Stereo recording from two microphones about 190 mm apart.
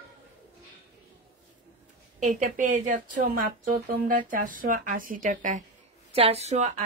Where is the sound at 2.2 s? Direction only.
40° right (ahead or behind).